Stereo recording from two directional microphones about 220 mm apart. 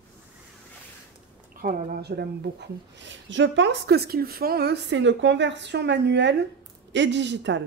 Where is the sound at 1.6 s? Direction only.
45° right (ahead or behind).